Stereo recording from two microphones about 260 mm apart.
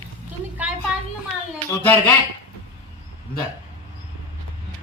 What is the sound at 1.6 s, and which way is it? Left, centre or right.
Speech, centre.